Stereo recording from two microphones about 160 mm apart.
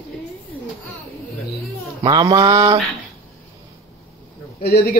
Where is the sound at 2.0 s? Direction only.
25° right (ahead or behind).